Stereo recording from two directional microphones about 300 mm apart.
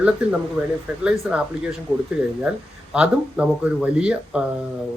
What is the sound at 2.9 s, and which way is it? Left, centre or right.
Speech, centre.